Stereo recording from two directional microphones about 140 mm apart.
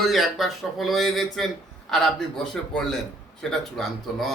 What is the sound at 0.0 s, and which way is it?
A man's voice, centre (ahead or behind).